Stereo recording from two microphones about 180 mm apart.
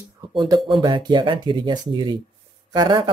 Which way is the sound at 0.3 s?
30° right (ahead or behind).